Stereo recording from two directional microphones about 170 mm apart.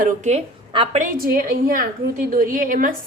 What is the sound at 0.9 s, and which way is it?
A woman's voice, 55° right (ahead or behind).